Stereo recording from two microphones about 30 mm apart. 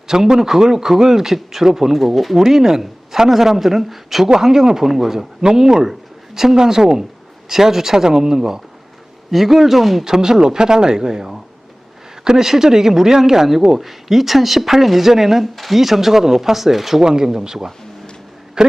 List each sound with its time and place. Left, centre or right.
0.1 s a man's voice: centre
2.3 s a man's voice: centre
5.4 s a man's voice: right
9.3 s speech: centre
10.0 s a man's voice: centre
17.0 s speech: right